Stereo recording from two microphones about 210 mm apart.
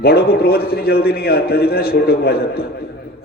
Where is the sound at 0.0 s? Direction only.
50° left (ahead or behind).